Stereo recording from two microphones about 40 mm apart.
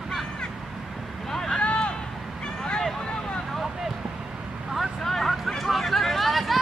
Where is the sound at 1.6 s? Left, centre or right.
Left.